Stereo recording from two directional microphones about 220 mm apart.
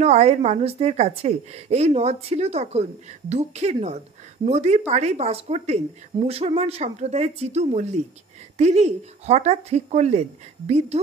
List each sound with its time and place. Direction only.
0.0 s a woman's voice: 30° right (ahead or behind)